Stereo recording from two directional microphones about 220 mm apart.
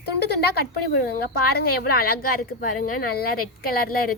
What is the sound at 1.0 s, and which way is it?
A woman's voice, 45° left (ahead or behind).